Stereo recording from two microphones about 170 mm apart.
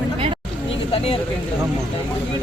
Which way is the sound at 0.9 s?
35° left (ahead or behind).